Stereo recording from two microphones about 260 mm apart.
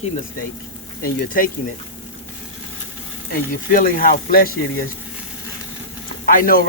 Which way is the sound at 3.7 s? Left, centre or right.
Left.